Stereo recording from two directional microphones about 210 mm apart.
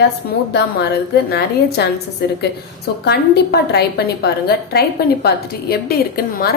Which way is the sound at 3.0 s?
50° left (ahead or behind).